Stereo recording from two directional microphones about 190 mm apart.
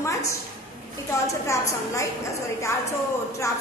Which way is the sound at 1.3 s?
15° left (ahead or behind).